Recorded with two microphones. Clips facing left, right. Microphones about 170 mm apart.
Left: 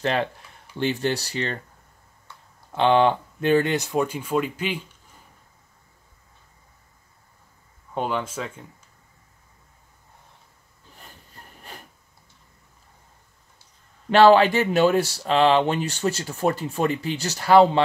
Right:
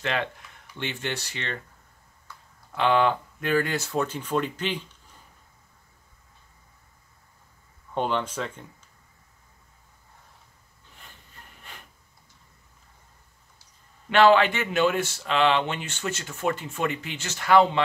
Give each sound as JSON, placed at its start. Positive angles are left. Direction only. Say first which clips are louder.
{"t": 0.0, "sound": "speech", "louder": "left 5 dB", "side_deg": 35}
{"t": 2.7, "sound": "speech", "louder": "left 4 dB", "side_deg": 30}
{"t": 7.9, "sound": "speech", "louder": "even", "side_deg": 5}
{"t": 11.0, "sound": "wood", "louder": "left 4 dB", "side_deg": 40}
{"t": 14.1, "sound": "speech", "louder": "left 4 dB", "side_deg": 35}